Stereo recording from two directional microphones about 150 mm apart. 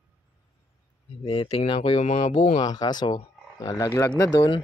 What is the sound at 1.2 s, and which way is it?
Speech, 40° left (ahead or behind).